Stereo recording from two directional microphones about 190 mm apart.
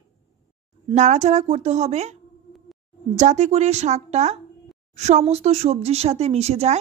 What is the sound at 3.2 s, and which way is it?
Speech, 40° right (ahead or behind).